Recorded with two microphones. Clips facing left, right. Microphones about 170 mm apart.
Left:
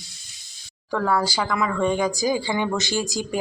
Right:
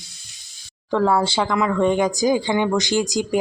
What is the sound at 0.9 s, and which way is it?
Speech, 20° right (ahead or behind).